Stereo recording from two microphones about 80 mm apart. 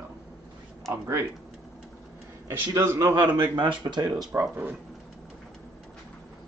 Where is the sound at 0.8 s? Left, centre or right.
Right.